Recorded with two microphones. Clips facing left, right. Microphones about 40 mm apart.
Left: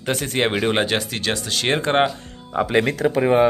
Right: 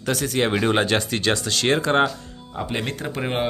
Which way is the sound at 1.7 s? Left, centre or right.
Left.